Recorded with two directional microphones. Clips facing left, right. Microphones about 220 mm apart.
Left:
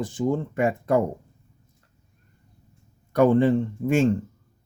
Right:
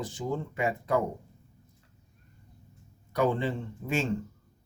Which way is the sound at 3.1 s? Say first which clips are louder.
Left 10 dB; 50° left (ahead or behind).